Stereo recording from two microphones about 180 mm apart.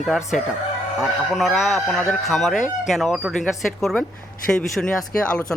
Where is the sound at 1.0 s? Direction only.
Centre (ahead or behind).